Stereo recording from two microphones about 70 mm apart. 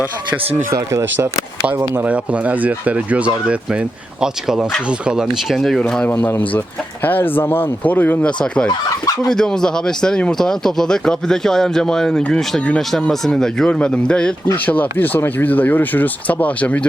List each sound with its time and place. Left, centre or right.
0.7 s speech: right
2.0 s speech: centre
4.2 s speech: centre
5.5 s speech: centre
6.1 s speech: left
8.4 s speech: centre
14.5 s speech: left